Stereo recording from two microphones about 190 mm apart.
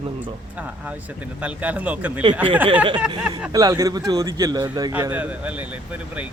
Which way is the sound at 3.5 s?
20° right (ahead or behind).